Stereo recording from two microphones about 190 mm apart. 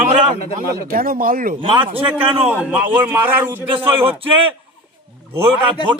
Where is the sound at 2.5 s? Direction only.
5° right (ahead or behind).